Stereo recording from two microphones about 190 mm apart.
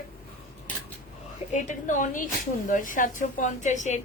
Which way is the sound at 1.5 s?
40° left (ahead or behind).